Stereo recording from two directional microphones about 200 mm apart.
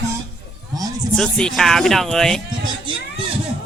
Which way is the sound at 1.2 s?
5° left (ahead or behind).